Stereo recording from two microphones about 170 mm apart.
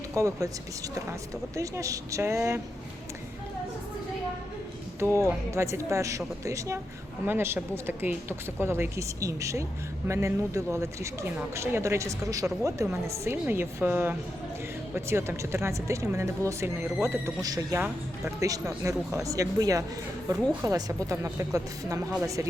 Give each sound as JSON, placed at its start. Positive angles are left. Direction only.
{"t": 0.1, "sound": "speech", "side_deg": -15}
{"t": 1.5, "sound": "speech", "side_deg": -20}
{"t": 4.9, "sound": "speech", "side_deg": -15}